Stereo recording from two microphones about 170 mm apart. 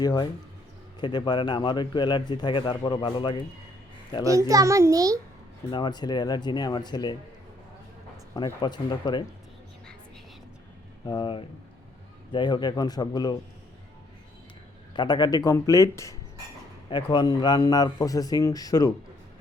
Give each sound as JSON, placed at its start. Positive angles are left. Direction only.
{"t": 0.0, "sound": "a man's voice", "side_deg": 25}
{"t": 4.2, "sound": "a child's voice", "side_deg": -20}
{"t": 5.7, "sound": "a man's voice", "side_deg": 25}
{"t": 8.3, "sound": "a man's voice", "side_deg": 20}
{"t": 11.0, "sound": "a man's voice", "side_deg": 25}
{"t": 14.9, "sound": "a man's voice", "side_deg": 25}